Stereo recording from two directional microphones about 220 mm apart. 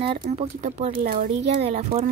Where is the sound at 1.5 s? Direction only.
30° right (ahead or behind).